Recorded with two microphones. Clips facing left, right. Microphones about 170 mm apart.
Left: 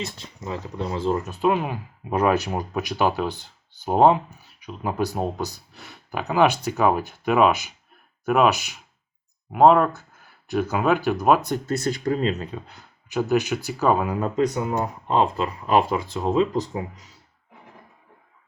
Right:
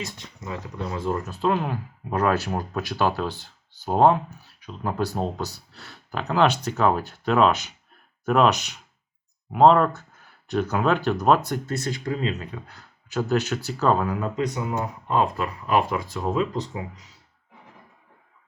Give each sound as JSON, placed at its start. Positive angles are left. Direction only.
{"t": 0.0, "sound": "speech", "side_deg": 30}
{"t": 11.7, "sound": "speech", "side_deg": 40}
{"t": 12.5, "sound": "speech", "side_deg": 20}
{"t": 14.2, "sound": "speech", "side_deg": 40}
{"t": 14.7, "sound": "speech", "side_deg": 25}